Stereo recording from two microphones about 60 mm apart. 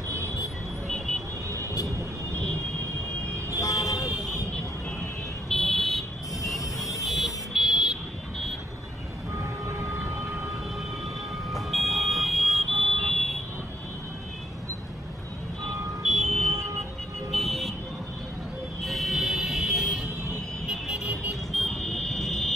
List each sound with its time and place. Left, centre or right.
0.8 s vehicle: centre
3.4 s vehicle: left
5.5 s vehicle: centre
11.5 s smoke detector: centre
16.3 s vehicle: centre
18.8 s vehicle: centre